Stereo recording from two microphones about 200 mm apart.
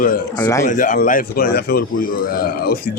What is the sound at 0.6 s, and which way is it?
A man's voice, 40° left (ahead or behind).